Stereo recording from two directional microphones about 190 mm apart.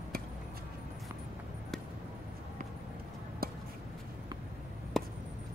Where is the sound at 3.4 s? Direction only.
50° right (ahead or behind).